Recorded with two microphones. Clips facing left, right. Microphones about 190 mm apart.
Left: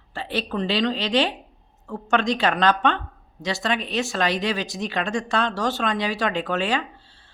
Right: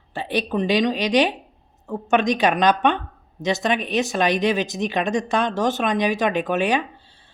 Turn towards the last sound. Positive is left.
turn(degrees=-15)  # may be behind; listen again after turning